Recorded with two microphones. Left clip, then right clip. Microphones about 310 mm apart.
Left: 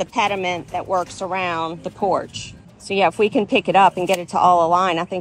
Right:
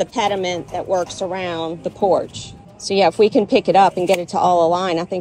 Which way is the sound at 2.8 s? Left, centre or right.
Centre.